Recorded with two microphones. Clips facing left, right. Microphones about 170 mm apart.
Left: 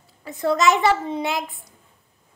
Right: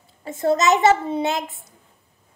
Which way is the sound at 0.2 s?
25° right (ahead or behind).